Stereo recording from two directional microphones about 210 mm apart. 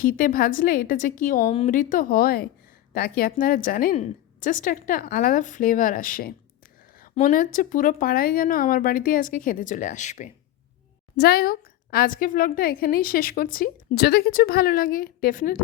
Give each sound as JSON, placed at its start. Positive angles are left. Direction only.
{"t": 0.0, "sound": "a woman's voice", "side_deg": 40}
{"t": 11.2, "sound": "a woman's voice", "side_deg": 45}